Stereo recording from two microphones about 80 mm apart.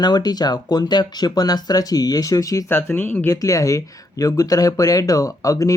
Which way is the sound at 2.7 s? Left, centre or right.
Left.